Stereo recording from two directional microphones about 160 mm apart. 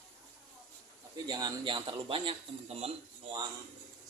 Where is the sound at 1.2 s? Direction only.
25° right (ahead or behind).